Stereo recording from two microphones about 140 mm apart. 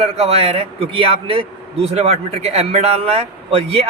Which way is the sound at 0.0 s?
45° right (ahead or behind).